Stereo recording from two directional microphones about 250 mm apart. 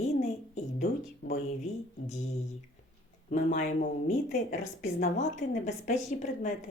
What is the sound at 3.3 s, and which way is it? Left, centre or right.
Speech, left.